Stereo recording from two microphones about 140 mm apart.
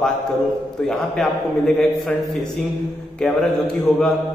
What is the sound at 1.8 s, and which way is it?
A man's voice, 5° left (ahead or behind).